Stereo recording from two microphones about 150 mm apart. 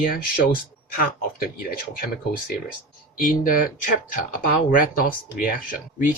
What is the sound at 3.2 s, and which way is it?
Speech, 70° left (ahead or behind).